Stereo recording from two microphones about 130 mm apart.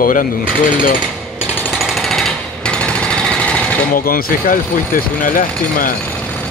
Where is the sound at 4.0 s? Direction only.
90° left.